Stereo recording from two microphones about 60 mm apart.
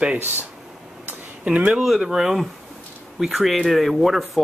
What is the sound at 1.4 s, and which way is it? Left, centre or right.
Speech, centre.